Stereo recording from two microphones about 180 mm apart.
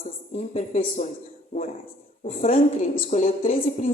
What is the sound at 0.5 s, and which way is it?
Speech, 35° left (ahead or behind).